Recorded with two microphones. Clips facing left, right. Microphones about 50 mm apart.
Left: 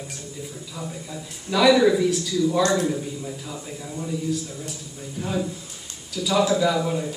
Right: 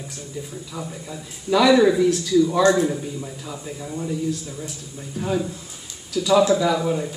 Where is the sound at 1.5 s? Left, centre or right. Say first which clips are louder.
Right 2 dB; centre.